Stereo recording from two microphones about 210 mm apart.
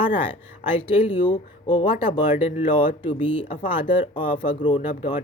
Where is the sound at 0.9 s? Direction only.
25° left (ahead or behind).